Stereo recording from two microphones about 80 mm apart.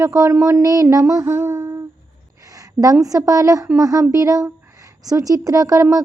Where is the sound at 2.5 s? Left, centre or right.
Right.